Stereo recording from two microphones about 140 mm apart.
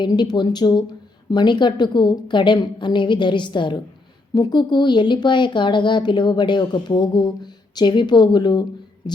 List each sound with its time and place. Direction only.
0.0 s speech: 30° left (ahead or behind)